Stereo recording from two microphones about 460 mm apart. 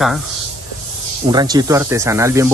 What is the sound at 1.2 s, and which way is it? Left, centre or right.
Speech, centre.